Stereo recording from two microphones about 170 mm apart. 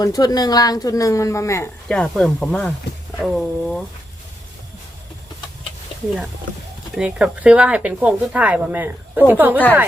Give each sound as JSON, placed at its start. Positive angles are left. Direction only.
{"t": 0.0, "sound": "speech", "side_deg": 20}
{"t": 1.9, "sound": "speech", "side_deg": 5}
{"t": 6.9, "sound": "speech", "side_deg": -5}